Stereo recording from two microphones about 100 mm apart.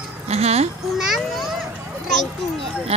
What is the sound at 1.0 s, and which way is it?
Speech, centre (ahead or behind).